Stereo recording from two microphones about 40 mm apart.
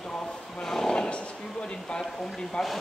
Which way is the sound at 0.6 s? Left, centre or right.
Centre.